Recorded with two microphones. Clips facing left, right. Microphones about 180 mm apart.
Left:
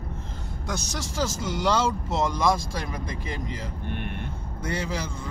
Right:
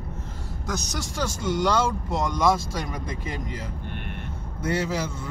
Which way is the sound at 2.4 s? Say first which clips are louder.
Right 2 dB; 5° right (ahead or behind).